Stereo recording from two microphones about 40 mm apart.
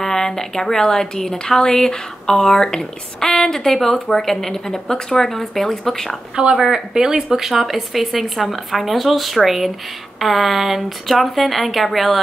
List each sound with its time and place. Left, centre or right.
0.0 s a woman's voice: centre
6.3 s speech: centre
7.6 s speech: centre